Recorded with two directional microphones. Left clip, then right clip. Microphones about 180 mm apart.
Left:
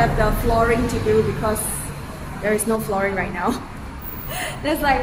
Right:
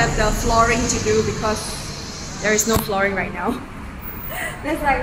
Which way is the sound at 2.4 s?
5° left (ahead or behind).